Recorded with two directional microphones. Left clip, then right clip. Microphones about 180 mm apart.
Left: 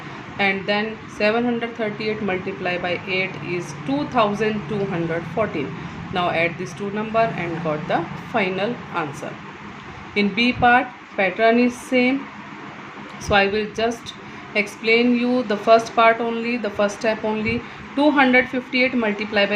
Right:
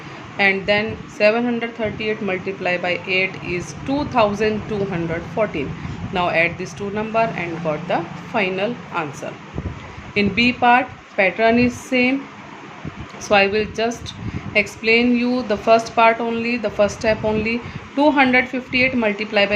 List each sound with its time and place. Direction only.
0.3 s speech: 25° right (ahead or behind)
10.2 s speech: 25° right (ahead or behind)
13.2 s speech: 25° right (ahead or behind)